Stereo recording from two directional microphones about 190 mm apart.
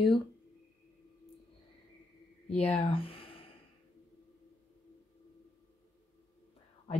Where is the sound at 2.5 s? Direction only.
30° left (ahead or behind).